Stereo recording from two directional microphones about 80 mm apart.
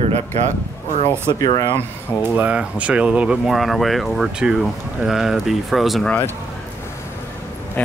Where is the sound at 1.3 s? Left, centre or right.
Left.